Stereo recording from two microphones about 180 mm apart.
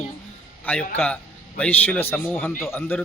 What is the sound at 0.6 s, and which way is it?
A man's voice, 10° left (ahead or behind).